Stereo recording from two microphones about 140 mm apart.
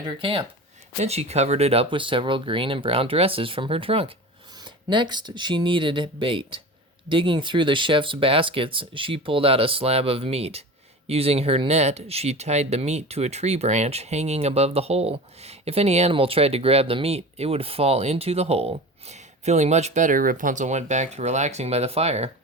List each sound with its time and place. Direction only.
0.0 s speech: 35° right (ahead or behind)